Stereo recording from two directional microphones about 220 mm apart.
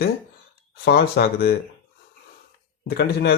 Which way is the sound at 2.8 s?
45° left (ahead or behind).